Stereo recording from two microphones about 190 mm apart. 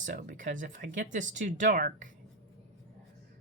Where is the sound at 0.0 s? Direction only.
40° right (ahead or behind).